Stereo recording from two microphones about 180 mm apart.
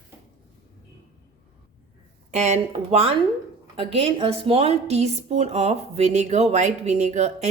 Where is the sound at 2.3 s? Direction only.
40° right (ahead or behind).